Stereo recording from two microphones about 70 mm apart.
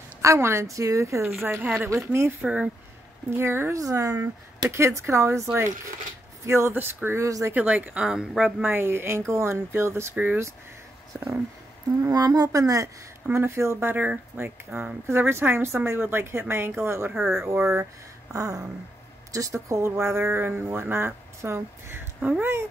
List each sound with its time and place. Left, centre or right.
0.2 s speech: right
1.2 s speech: right
2.4 s speech: right
3.3 s speech: right
3.7 s speech: right
7.2 s speech: right
7.5 s speech: right
8.6 s speech: right
10.1 s speech: right
11.1 s speech: right
12.0 s speech: right
13.4 s speech: right